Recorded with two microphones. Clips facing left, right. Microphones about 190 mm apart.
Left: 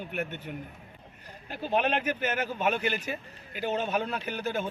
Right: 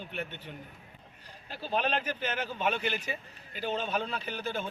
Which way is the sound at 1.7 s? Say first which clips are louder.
Left 4 dB; 10° left (ahead or behind).